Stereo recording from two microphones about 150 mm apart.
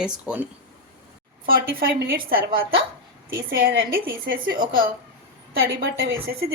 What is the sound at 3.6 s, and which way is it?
Speech, 75° right (ahead or behind).